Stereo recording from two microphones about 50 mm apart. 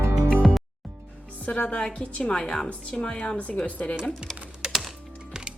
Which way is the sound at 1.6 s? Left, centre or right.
Left.